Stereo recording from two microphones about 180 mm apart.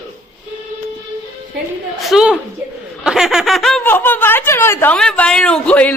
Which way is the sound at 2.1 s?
5° right (ahead or behind).